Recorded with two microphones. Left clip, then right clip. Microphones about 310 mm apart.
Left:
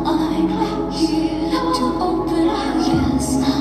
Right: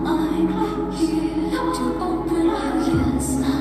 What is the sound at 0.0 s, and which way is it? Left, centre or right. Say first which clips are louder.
Music: left 2 dB; centre.